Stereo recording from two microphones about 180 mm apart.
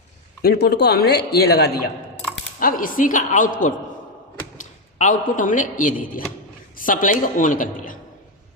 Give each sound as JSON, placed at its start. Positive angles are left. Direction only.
{"t": 0.4, "sound": "speech", "side_deg": 65}
{"t": 2.6, "sound": "a woman's voice", "side_deg": 50}